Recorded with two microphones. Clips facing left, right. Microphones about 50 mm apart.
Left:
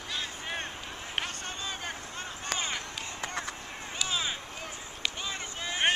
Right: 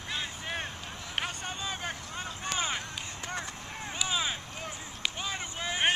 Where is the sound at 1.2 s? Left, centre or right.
Centre.